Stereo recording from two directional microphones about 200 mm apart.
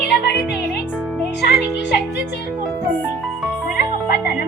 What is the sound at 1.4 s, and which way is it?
Speech, 55° left (ahead or behind).